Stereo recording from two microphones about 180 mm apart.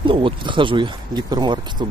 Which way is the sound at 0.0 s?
30° right (ahead or behind).